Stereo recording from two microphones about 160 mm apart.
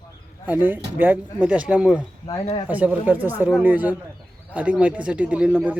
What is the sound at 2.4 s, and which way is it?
Speech, 35° left (ahead or behind).